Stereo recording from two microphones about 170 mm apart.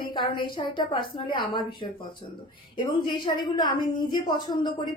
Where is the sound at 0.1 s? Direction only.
30° left (ahead or behind).